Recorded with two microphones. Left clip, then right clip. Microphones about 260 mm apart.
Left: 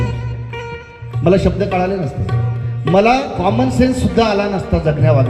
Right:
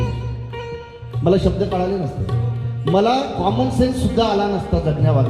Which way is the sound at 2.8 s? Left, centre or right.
Left.